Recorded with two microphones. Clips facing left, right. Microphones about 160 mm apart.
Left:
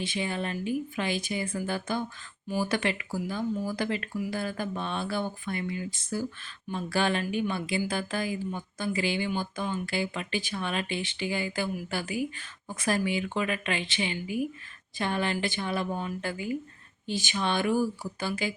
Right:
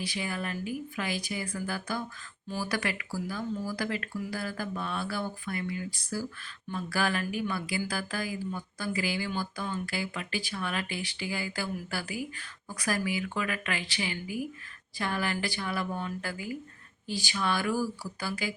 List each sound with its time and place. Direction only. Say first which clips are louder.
0.0 s speech: left 3 dB; 25° left (ahead or behind)